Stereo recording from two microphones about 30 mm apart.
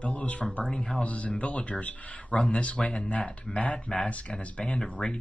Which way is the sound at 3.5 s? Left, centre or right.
Left.